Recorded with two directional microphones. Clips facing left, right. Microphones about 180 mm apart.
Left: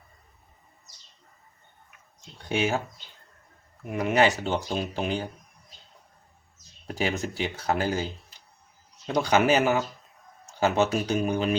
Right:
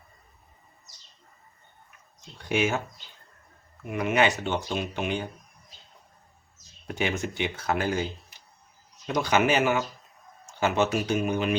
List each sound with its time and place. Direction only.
2.5 s speech: 35° left (ahead or behind)
3.8 s speech: 35° left (ahead or behind)
6.8 s speech: 35° left (ahead or behind)
9.0 s speech: 35° left (ahead or behind)